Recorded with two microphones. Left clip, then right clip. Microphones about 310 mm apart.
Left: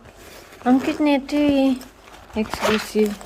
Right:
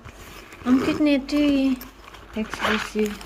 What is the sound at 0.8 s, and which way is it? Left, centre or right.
Speech, centre.